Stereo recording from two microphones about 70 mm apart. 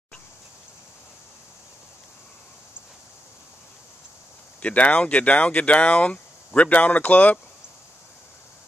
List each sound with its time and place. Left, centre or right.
4.6 s speech: centre